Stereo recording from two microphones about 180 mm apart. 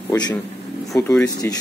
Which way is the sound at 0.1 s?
20° left (ahead or behind).